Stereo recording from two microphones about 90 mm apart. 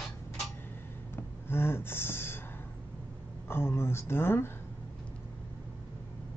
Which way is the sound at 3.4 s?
25° left (ahead or behind).